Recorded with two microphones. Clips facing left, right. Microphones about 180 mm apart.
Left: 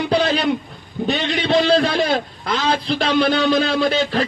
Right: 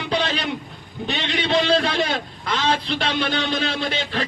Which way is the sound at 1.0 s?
40° left (ahead or behind).